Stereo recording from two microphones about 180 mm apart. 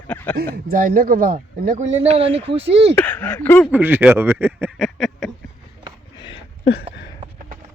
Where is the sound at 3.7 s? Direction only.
10° right (ahead or behind).